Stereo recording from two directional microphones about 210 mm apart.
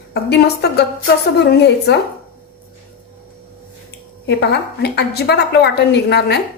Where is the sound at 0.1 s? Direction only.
50° left (ahead or behind).